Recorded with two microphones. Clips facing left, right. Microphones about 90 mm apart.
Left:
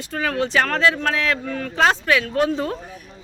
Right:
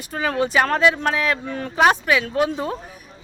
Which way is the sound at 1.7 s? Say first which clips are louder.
Right 1 dB; 15° right (ahead or behind).